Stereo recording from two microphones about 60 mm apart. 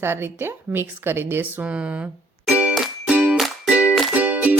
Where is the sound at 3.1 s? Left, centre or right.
Right.